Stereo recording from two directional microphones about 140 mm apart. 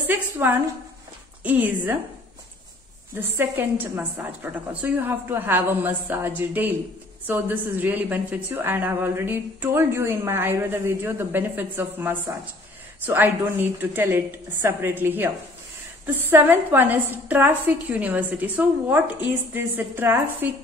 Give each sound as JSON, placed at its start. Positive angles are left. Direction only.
{"t": 0.0, "sound": "a woman's voice", "side_deg": -15}
{"t": 3.2, "sound": "a woman's voice", "side_deg": -15}